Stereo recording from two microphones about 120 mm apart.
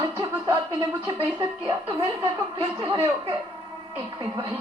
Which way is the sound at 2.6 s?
30° right (ahead or behind).